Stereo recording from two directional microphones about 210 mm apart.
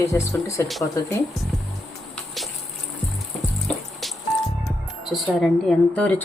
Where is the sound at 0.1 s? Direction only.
15° left (ahead or behind).